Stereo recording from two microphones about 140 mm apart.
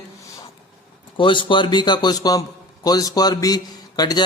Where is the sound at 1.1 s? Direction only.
35° left (ahead or behind).